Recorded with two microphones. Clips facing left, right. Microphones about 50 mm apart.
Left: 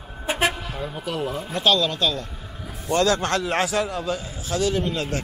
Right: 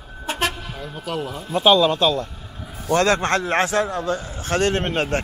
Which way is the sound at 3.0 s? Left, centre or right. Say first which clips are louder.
Right 2 dB; right.